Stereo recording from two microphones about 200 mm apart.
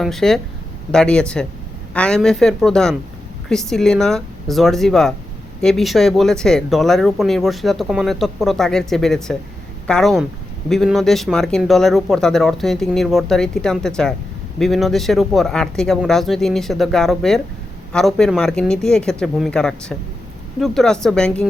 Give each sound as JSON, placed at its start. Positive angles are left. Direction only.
{"t": 0.0, "sound": "speech", "side_deg": 0}